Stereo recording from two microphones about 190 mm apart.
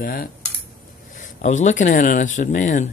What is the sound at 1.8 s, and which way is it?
Speech, 45° left (ahead or behind).